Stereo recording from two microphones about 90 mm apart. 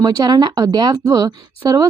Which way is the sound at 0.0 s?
50° right (ahead or behind).